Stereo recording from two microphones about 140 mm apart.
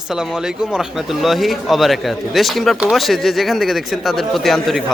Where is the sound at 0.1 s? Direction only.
5° right (ahead or behind).